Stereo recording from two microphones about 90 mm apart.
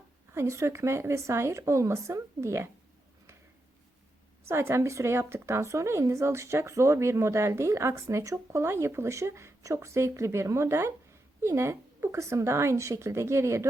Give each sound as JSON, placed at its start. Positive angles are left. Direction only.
{"t": 0.3, "sound": "speech", "side_deg": -30}
{"t": 4.4, "sound": "speech", "side_deg": -30}